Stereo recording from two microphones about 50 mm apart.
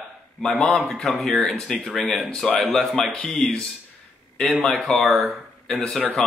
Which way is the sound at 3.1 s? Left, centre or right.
Left.